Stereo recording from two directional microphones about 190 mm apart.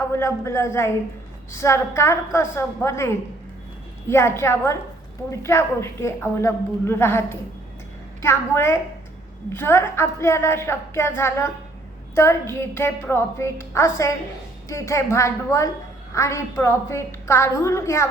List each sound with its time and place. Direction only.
0.2 s a man's voice: 15° left (ahead or behind)
4.1 s a man's voice: 15° left (ahead or behind)